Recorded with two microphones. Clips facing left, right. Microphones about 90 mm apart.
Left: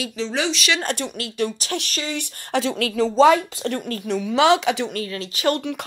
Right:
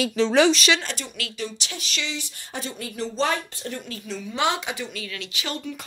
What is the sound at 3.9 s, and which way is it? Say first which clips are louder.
A woman's voice: left 9 dB; 65° left (ahead or behind).